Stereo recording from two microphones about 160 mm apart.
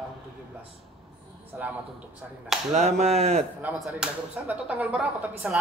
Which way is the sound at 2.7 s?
45° right (ahead or behind).